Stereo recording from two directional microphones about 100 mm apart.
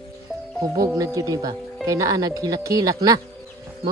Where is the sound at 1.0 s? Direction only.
35° right (ahead or behind).